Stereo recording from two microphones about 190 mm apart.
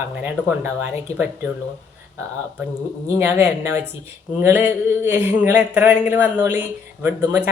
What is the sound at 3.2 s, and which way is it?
Speech, 15° right (ahead or behind).